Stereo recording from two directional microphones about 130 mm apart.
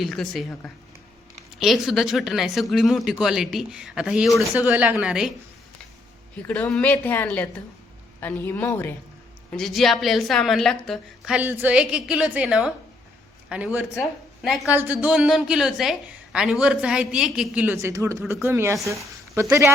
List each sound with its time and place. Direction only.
0.0 s a woman's voice: centre (ahead or behind)
6.3 s a woman's voice: 10° left (ahead or behind)
9.5 s speech: centre (ahead or behind)
11.3 s a woman's voice: 15° right (ahead or behind)
14.7 s a woman's voice: 15° right (ahead or behind)
17.9 s a woman's voice: 25° right (ahead or behind)